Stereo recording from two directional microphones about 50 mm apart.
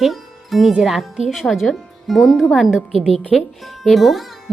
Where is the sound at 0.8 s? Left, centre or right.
Centre.